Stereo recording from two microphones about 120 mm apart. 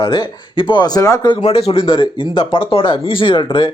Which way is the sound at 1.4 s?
55° left (ahead or behind).